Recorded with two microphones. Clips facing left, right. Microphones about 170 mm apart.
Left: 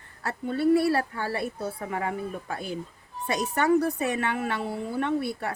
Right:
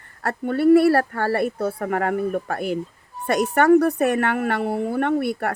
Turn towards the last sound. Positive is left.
turn(degrees=-60)  # may be behind; listen again after turning